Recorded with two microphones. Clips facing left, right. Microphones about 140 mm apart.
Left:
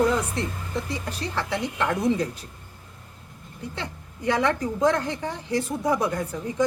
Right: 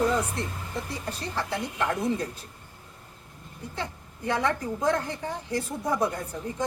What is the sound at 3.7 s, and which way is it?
A woman's voice, 90° left.